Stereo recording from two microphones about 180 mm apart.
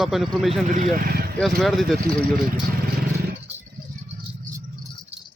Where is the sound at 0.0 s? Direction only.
Centre (ahead or behind).